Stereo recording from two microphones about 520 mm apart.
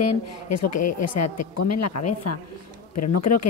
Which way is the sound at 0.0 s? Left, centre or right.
Left.